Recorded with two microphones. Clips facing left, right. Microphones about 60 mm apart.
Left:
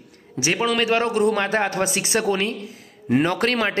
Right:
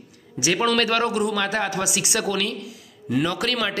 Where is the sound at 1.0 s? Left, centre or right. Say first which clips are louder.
Left 3 dB; left.